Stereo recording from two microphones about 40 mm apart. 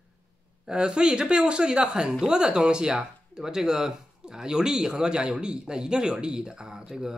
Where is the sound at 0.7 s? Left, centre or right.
Right.